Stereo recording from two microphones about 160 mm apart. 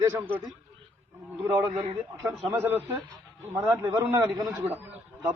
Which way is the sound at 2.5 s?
15° right (ahead or behind).